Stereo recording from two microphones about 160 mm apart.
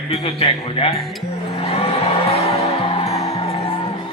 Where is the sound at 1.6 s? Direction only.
40° left (ahead or behind).